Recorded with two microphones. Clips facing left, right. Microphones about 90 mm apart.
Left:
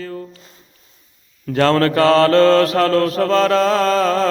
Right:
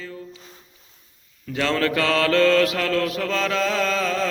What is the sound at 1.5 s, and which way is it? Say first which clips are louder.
Mantra: left 8 dB; 45° left (ahead or behind).